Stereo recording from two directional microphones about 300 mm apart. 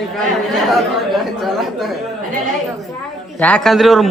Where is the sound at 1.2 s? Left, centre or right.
Centre.